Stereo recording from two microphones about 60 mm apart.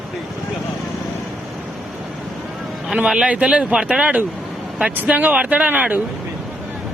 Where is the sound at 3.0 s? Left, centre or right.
Centre.